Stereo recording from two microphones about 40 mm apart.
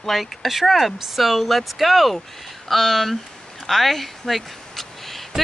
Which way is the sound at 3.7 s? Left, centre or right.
Centre.